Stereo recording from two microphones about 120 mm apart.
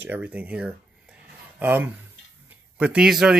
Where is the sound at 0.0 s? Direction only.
15° right (ahead or behind).